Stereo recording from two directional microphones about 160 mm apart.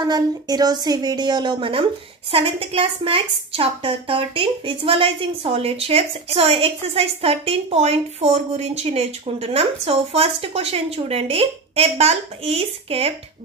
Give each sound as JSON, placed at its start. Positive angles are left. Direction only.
{"t": 0.0, "sound": "a woman's voice", "side_deg": -25}